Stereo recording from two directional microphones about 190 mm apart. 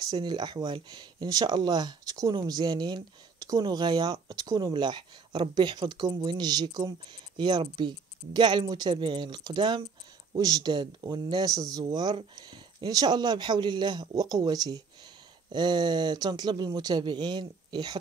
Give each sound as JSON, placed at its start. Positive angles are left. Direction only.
{"t": 0.1, "sound": "speech", "side_deg": -20}